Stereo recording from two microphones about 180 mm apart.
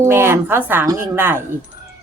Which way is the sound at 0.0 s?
15° right (ahead or behind).